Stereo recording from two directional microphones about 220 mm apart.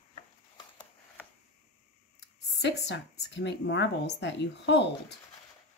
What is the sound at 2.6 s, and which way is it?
Speech, 55° left (ahead or behind).